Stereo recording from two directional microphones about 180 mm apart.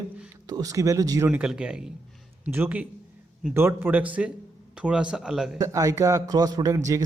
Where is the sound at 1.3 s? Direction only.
5° right (ahead or behind).